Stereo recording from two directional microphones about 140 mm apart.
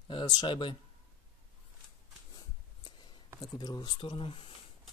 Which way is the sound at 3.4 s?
30° left (ahead or behind).